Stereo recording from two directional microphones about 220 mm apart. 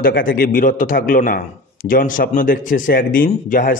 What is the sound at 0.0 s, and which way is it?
A man's voice, 40° left (ahead or behind).